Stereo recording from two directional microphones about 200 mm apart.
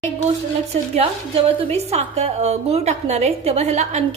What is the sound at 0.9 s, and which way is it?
A woman's voice, 30° right (ahead or behind).